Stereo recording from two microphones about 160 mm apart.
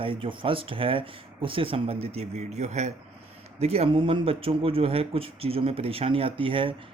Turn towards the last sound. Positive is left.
turn(degrees=-35)  # may be behind; listen again after turning